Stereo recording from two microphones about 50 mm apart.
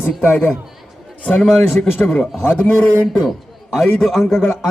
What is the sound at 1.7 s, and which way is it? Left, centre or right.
Speech, left.